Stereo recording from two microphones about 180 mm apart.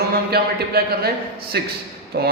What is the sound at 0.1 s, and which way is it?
A man's voice, 60° right (ahead or behind).